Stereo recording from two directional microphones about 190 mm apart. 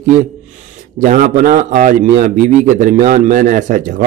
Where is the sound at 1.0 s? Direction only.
45° right (ahead or behind).